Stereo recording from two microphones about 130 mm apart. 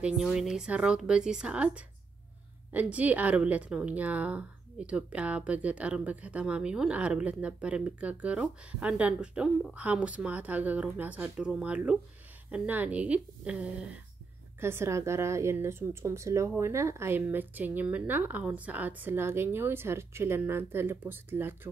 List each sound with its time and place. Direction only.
0.0 s a woman's voice: 5° right (ahead or behind)
14.6 s a woman's voice: 20° right (ahead or behind)